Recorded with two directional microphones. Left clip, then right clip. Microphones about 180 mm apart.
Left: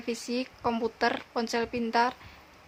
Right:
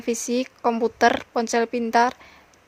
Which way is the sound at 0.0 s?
40° right (ahead or behind).